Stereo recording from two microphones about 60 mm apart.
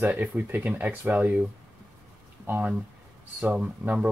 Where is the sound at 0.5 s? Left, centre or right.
Right.